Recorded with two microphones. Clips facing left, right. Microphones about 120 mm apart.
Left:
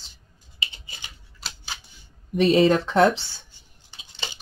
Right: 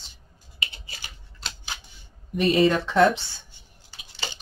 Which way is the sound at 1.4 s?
5° left (ahead or behind).